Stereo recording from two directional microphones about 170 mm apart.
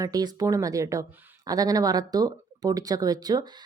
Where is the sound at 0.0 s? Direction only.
20° right (ahead or behind).